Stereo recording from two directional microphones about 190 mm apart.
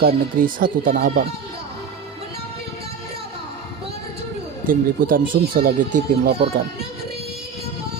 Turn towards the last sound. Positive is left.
turn(degrees=-50)  # may be behind; listen again after turning